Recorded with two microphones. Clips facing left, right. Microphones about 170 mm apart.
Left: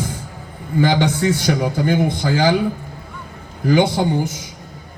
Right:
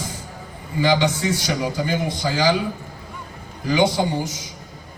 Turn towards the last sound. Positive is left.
turn(degrees=55)  # may be behind; listen again after turning